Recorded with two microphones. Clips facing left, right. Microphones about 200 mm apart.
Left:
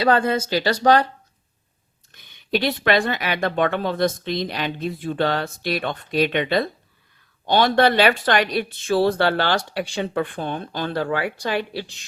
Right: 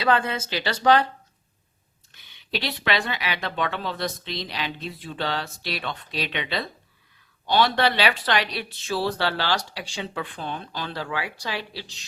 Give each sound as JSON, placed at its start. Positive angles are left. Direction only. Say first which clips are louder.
{"t": 0.0, "sound": "speech", "louder": "left 5 dB", "side_deg": 40}
{"t": 2.1, "sound": "speech", "louder": "left 8 dB", "side_deg": 50}